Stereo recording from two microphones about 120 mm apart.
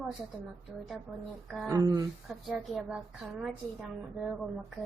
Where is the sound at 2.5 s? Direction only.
5° right (ahead or behind).